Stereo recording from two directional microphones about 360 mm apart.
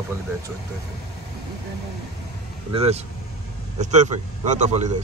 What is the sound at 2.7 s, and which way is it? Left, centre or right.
Speech, centre.